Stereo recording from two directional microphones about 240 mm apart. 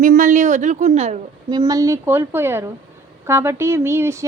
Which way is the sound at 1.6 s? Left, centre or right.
Centre.